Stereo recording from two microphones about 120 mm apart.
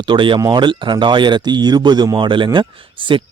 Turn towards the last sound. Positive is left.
turn(degrees=-45)  # may be behind; listen again after turning